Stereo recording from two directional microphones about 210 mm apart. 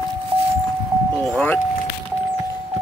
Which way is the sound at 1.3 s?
5° left (ahead or behind).